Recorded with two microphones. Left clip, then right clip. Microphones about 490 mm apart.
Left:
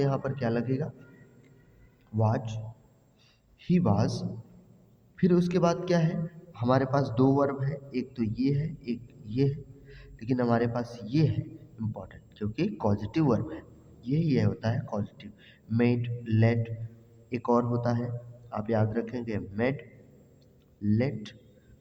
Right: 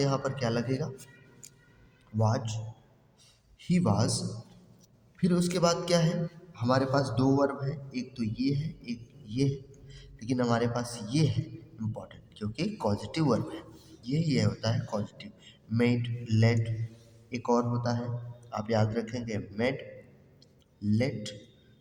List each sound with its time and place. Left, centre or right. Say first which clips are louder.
0.0 s a man's voice: even; left
2.1 s a man's voice: left 1 dB; left
3.6 s a man's voice: left 1 dB; left
20.8 s a man's voice: left 1 dB; left